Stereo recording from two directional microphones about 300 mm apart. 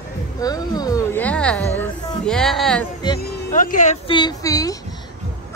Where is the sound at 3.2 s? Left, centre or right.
Left; by 4.7 s centre.